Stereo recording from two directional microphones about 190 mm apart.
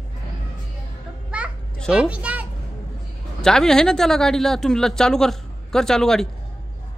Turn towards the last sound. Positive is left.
turn(degrees=0)  # may be behind; listen again after turning